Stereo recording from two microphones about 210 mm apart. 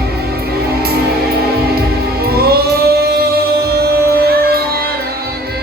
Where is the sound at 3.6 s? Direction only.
50° right (ahead or behind).